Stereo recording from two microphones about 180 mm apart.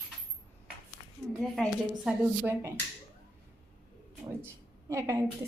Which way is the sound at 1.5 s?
Centre (ahead or behind).